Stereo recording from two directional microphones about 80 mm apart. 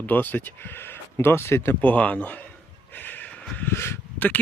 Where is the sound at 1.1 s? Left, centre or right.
Left.